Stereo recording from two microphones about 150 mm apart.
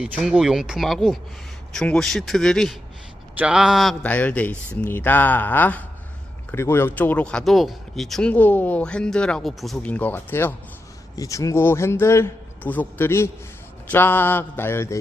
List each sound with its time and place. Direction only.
0.0 s speech: 5° right (ahead or behind)
4.0 s speech: 10° left (ahead or behind)